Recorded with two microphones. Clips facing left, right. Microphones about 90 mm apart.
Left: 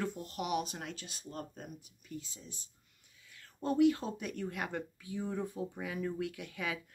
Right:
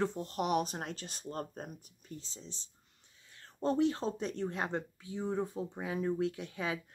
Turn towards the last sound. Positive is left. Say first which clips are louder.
# right 2 dB
turn(degrees=-25)  # may be behind; listen again after turning